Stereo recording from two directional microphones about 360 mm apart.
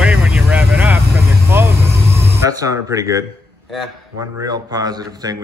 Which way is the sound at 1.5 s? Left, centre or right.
Centre.